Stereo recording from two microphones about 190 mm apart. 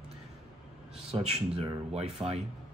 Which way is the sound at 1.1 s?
30° right (ahead or behind).